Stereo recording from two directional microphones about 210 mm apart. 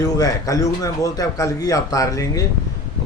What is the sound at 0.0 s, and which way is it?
Speech, 15° left (ahead or behind).